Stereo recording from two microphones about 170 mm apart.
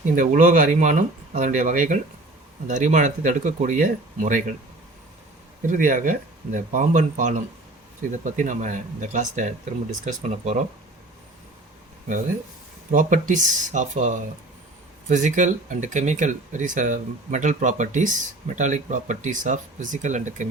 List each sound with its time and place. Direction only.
0.2 s speech: 50° right (ahead or behind)
5.6 s speech: 50° right (ahead or behind)
12.9 s speech: 50° right (ahead or behind)